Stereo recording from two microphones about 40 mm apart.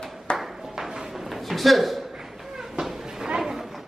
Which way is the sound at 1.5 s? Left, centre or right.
Centre.